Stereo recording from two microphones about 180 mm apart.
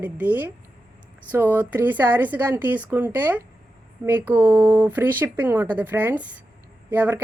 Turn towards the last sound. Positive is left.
turn(degrees=-10)  # may be behind; listen again after turning